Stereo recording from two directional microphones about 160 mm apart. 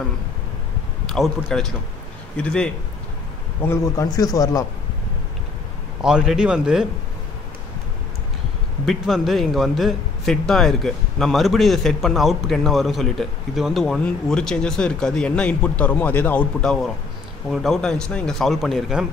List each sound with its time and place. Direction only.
1.0 s a man's voice: centre (ahead or behind)
3.6 s a man's voice: 20° left (ahead or behind)
6.0 s a man's voice: 5° right (ahead or behind)
8.8 s a man's voice: centre (ahead or behind)